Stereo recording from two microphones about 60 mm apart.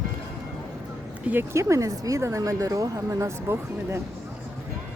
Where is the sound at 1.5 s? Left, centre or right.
Right.